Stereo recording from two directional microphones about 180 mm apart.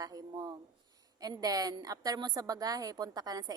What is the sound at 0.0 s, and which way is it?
A woman's voice, 20° right (ahead or behind).